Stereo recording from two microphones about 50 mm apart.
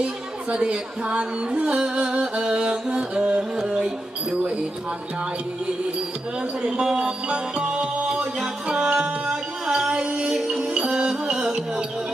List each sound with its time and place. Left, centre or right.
0.5 s music: right
6.6 s music: centre